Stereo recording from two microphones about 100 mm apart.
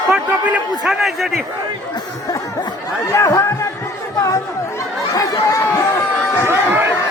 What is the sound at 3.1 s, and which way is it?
Speech, 35° left (ahead or behind).